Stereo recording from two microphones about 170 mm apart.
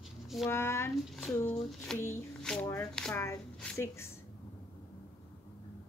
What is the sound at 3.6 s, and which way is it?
Speech, 15° left (ahead or behind).